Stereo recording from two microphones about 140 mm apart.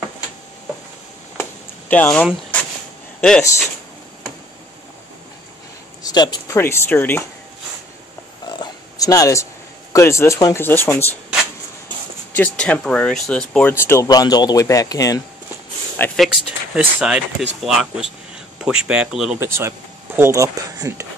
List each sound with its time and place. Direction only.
1.4 s a sound: 15° left (ahead or behind)
3.2 s speech: 5° left (ahead or behind)
6.0 s speech: 30° left (ahead or behind)
6.5 s speech: 15° left (ahead or behind)
8.5 s a sound: 30° left (ahead or behind)
9.9 s speech: 20° left (ahead or behind)
12.3 s speech: 10° left (ahead or behind)
13.7 s speech: 20° left (ahead or behind)
16.2 s speech: 5° right (ahead or behind)
19.4 s speech: 20° right (ahead or behind)